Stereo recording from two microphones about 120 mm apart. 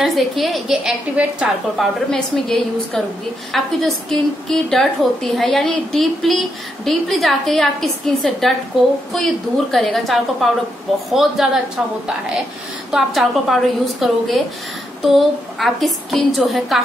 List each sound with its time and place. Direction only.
0.0 s a woman's voice: centre (ahead or behind)
2.0 s a woman's voice: 5° left (ahead or behind)
12.9 s a woman's voice: centre (ahead or behind)